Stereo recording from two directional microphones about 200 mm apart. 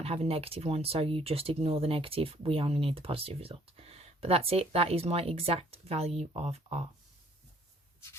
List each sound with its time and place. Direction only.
0.0 s speech: 30° right (ahead or behind)